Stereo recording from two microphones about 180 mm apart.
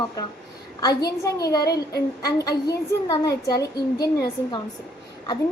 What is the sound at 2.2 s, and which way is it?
A woman's voice, 20° left (ahead or behind).